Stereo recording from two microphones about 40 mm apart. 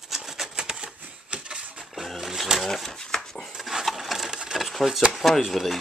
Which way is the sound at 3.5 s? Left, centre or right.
Centre.